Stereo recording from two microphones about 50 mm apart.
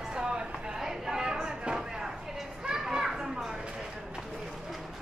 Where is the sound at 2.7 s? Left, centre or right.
Centre.